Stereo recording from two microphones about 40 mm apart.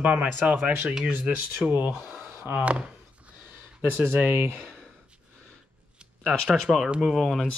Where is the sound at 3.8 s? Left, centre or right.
Right.